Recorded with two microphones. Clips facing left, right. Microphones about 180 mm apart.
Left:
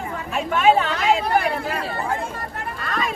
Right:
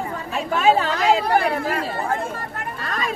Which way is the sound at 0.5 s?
35° right (ahead or behind).